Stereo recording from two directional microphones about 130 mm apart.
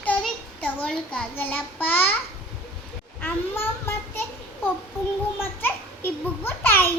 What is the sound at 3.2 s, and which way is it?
Child singing, 20° left (ahead or behind).